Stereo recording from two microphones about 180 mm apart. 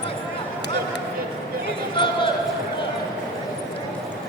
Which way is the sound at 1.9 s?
25° left (ahead or behind).